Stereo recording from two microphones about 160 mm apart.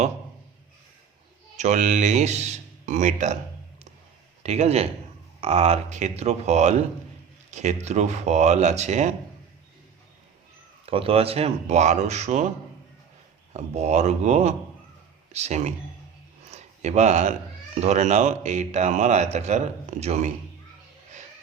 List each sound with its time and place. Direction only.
1.5 s speech: 50° right (ahead or behind)
4.4 s a man's voice: 40° right (ahead or behind)
10.8 s speech: 35° right (ahead or behind)
13.5 s speech: 45° right (ahead or behind)
16.5 s a sound: 45° right (ahead or behind)
17.7 s speech: 45° right (ahead or behind)